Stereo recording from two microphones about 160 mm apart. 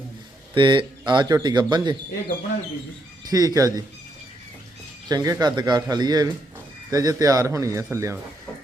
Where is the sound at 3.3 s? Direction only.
25° right (ahead or behind).